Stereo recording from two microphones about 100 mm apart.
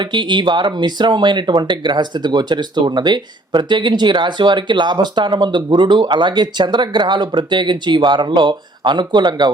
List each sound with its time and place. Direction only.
0.0 s speech: 50° right (ahead or behind)